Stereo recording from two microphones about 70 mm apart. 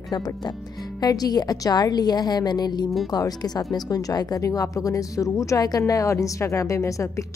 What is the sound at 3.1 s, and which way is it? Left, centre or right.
Speech, left.